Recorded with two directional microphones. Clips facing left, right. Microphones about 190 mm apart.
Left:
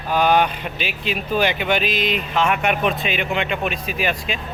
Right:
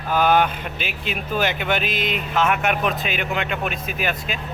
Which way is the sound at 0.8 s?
50° right (ahead or behind).